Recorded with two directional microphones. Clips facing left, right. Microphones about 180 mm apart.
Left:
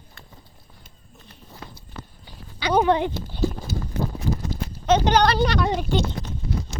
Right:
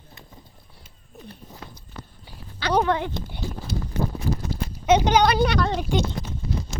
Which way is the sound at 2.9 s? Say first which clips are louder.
Left 4 dB; 20° left (ahead or behind).